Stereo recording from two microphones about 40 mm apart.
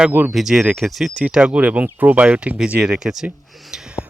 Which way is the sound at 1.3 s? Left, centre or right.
Centre.